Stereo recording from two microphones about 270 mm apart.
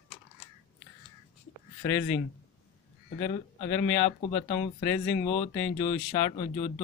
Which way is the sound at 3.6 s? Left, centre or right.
Left.